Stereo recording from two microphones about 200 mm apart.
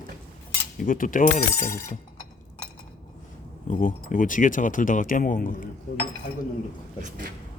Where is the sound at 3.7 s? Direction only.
45° left (ahead or behind).